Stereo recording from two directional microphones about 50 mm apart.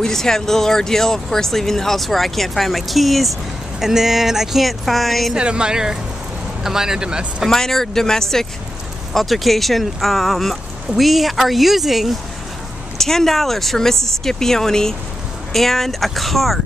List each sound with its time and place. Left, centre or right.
0.0 s speech: centre
5.3 s speech: centre
7.4 s speech: centre
12.9 s speech: centre